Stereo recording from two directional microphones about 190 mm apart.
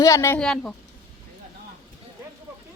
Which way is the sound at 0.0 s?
15° left (ahead or behind).